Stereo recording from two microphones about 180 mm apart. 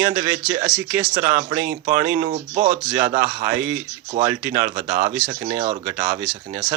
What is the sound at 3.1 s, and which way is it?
Speech, 10° right (ahead or behind).